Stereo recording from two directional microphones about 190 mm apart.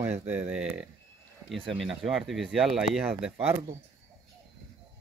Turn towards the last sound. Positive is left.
turn(degrees=-30)  # may be behind; listen again after turning